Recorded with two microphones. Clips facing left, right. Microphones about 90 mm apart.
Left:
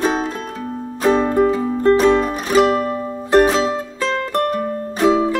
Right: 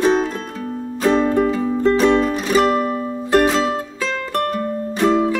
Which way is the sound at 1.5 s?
10° left (ahead or behind).